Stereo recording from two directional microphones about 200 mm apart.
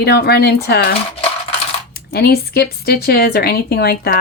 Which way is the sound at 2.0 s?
50° left (ahead or behind).